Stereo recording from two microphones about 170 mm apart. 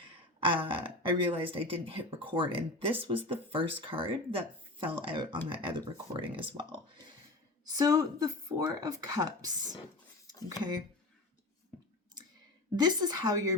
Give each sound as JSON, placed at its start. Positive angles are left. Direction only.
{"t": 0.3, "sound": "speech", "side_deg": -30}
{"t": 12.7, "sound": "speech", "side_deg": -25}